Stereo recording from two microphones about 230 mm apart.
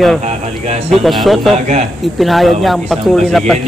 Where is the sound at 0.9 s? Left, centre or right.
Centre.